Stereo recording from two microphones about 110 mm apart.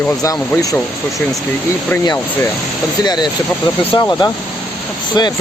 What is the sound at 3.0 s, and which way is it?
Speech, 40° left (ahead or behind).